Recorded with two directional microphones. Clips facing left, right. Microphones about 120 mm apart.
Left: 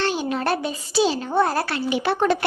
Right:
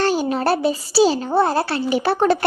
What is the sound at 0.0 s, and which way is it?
Speech, 40° right (ahead or behind).